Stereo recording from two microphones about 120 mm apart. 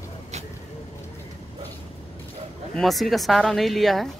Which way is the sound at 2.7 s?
Centre (ahead or behind).